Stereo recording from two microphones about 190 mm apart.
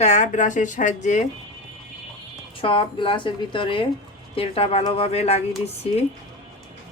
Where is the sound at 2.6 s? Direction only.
25° left (ahead or behind).